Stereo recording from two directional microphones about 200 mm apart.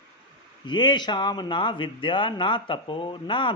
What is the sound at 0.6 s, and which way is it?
Speech, 20° left (ahead or behind).